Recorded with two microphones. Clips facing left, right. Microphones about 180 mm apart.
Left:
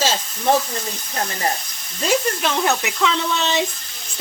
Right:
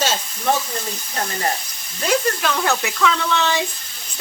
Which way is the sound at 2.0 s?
20° left (ahead or behind).